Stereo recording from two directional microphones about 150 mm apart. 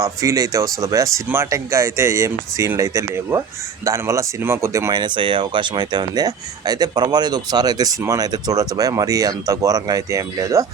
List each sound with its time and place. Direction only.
0.0 s speech: 20° right (ahead or behind)